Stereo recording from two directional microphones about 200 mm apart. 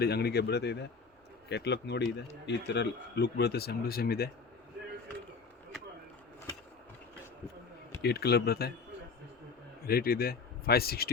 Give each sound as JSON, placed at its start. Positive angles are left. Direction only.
{"t": 0.0, "sound": "speech", "side_deg": 55}
{"t": 8.0, "sound": "speech", "side_deg": 55}
{"t": 9.8, "sound": "speech", "side_deg": 50}